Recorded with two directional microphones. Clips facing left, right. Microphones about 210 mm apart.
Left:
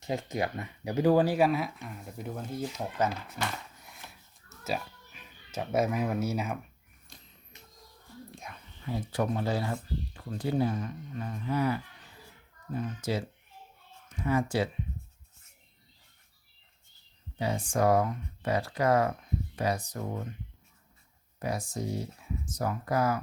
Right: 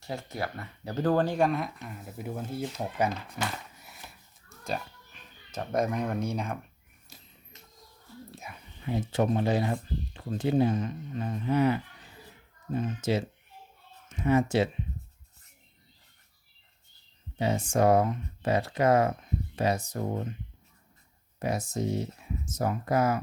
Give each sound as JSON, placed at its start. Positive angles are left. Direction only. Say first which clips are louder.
{"t": 0.0, "sound": "speech", "louder": "left 3 dB", "side_deg": 15}
{"t": 3.4, "sound": "sniff", "louder": "even", "side_deg": -5}
{"t": 7.1, "sound": "a sound", "louder": "right 1 dB", "side_deg": -5}
{"t": 8.4, "sound": "dog", "louder": "right 1 dB", "side_deg": -5}
{"t": 8.8, "sound": "speech", "louder": "right 4 dB", "side_deg": -20}
{"t": 17.3, "sound": "speech", "louder": "right 3 dB", "side_deg": -25}
{"t": 21.3, "sound": "speech", "louder": "right 3 dB", "side_deg": -25}